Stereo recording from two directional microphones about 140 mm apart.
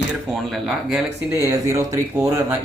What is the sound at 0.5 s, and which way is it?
Speech, 5° right (ahead or behind).